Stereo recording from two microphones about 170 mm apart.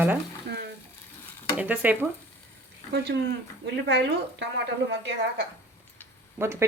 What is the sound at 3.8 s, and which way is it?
A woman's voice, 90° right.